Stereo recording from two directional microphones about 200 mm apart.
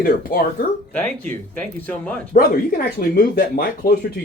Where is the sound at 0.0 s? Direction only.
45° left (ahead or behind).